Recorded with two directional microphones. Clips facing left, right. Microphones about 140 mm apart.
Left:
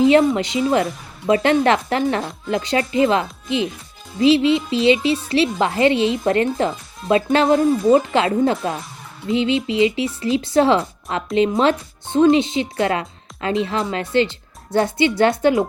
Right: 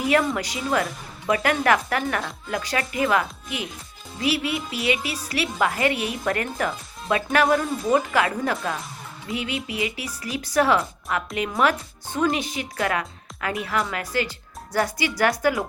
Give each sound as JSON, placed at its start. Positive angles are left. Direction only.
{"t": 0.0, "sound": "speech", "side_deg": 25}